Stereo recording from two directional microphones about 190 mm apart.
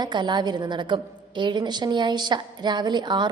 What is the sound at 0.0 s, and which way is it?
A woman's voice, 25° right (ahead or behind).